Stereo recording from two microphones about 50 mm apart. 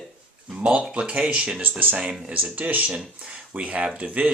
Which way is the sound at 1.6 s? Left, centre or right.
Right.